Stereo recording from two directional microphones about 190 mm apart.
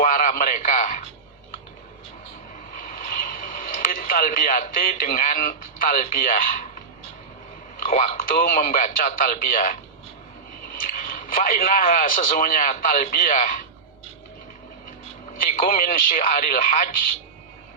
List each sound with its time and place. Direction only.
0.0 s a sound: 45° left (ahead or behind)
2.7 s vehicle: 45° left (ahead or behind)
3.8 s speech: 45° left (ahead or behind)
7.9 s speech: 45° left (ahead or behind)
10.8 s speech: 45° left (ahead or behind)
15.4 s speech: 45° left (ahead or behind)